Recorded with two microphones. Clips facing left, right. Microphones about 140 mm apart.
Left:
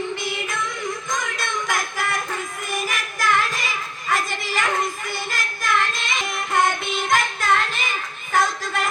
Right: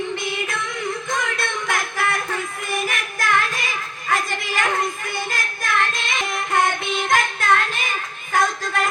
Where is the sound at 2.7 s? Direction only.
55° right (ahead or behind).